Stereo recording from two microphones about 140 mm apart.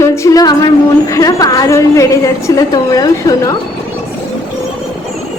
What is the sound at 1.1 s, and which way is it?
A woman's voice, 25° left (ahead or behind).